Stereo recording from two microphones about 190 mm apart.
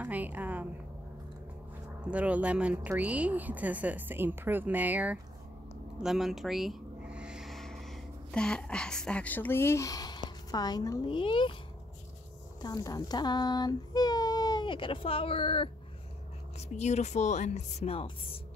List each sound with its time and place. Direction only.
0.0 s a woman's voice: 10° right (ahead or behind)
2.0 s speech: 5° right (ahead or behind)
6.0 s a sound: centre (ahead or behind); by 10.2 s 20° left (ahead or behind)
10.5 s a woman's voice: 20° left (ahead or behind)
12.6 s a child's voice: 20° left (ahead or behind)